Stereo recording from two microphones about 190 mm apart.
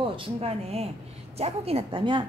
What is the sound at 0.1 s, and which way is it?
A woman's voice, 30° right (ahead or behind).